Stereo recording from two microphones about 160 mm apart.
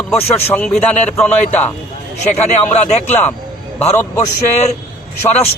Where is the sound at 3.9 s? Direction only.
15° left (ahead or behind).